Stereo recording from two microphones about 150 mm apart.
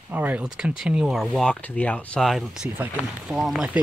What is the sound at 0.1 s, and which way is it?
Speech, 10° right (ahead or behind).